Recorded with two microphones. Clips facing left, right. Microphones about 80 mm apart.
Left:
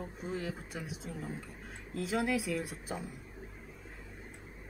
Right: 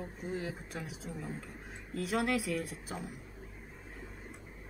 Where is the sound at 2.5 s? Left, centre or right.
Centre.